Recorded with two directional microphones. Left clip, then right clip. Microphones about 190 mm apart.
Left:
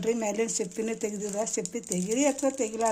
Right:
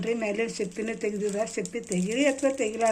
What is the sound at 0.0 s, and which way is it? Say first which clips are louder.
Speech: even; 55° left (ahead or behind).